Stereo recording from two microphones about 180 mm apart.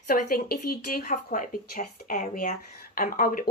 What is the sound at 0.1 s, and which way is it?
Speech, 55° left (ahead or behind).